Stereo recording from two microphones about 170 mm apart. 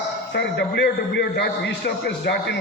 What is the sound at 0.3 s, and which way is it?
A man's voice, 85° left.